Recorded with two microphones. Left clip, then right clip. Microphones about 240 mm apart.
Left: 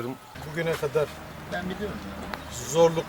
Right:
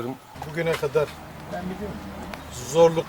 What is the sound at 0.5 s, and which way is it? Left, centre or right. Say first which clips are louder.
Speech: right 3 dB; centre.